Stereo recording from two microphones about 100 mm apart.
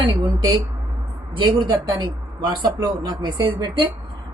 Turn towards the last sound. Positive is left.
turn(degrees=-45)  # may be behind; listen again after turning